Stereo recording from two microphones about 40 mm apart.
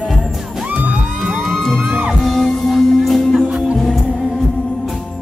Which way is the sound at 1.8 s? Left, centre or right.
Right.